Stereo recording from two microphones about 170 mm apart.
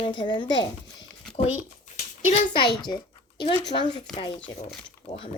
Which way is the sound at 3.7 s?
30° left (ahead or behind).